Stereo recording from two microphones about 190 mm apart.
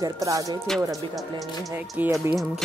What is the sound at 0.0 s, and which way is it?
Speech, 20° right (ahead or behind).